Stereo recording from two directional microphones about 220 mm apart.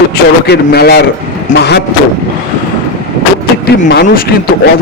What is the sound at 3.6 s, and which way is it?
Speech, 45° left (ahead or behind).